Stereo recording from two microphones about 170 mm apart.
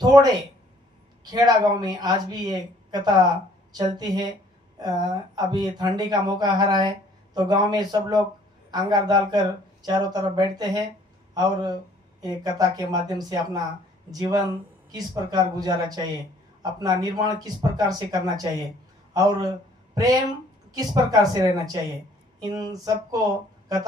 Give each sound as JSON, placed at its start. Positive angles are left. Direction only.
{"t": 0.0, "sound": "speech", "side_deg": -25}
{"t": 12.2, "sound": "a man's voice", "side_deg": -20}